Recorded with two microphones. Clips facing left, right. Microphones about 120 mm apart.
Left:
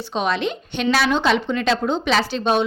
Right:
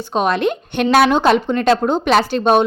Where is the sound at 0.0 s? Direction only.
50° right (ahead or behind).